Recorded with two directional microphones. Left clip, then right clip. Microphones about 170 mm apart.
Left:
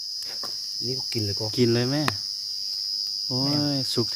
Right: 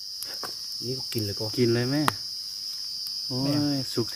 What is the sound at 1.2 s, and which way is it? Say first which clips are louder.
Cricket: left 1 dB; 30° left (ahead or behind).